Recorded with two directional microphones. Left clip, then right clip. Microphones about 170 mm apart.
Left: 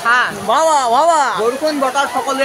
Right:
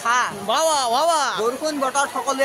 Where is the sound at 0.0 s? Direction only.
30° right (ahead or behind).